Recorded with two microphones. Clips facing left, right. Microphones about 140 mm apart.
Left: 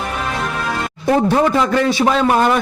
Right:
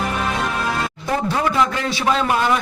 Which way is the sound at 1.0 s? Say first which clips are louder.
Left 8 dB; 45° left (ahead or behind).